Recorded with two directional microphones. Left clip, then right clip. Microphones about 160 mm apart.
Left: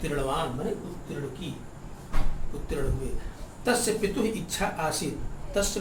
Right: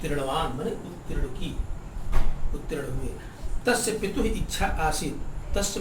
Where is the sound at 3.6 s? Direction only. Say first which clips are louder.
Right 1 dB; 25° left (ahead or behind).